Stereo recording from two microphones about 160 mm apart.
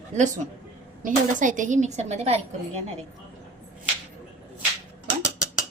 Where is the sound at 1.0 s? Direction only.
55° right (ahead or behind).